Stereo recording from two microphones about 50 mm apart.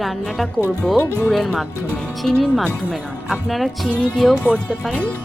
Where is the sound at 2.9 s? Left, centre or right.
Right.